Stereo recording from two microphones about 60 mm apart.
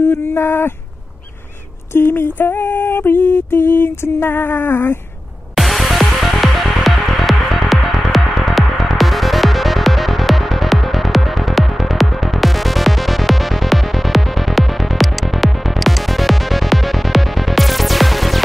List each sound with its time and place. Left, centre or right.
0.1 s music: left
2.0 s music: left
5.6 s music: centre